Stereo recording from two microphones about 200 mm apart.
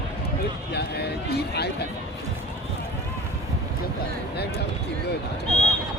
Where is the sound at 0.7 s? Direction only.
55° left (ahead or behind).